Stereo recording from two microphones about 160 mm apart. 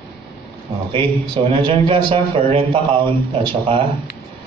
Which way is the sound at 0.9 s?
30° right (ahead or behind).